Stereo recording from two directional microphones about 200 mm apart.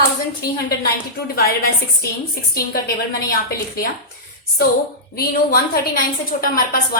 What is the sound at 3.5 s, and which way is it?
Speech, 50° left (ahead or behind).